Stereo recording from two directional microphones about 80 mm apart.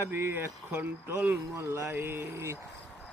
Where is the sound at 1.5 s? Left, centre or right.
Right.